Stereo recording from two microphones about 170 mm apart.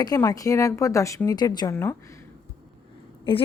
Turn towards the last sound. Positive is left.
turn(degrees=30)  # may be behind; listen again after turning